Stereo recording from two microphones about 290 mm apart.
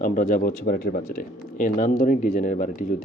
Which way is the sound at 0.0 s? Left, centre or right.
Left.